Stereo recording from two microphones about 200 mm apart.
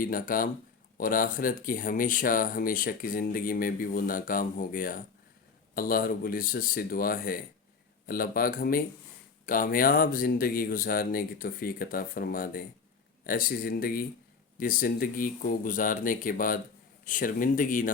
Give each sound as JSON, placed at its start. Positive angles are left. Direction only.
{"t": 0.0, "sound": "speech", "side_deg": 45}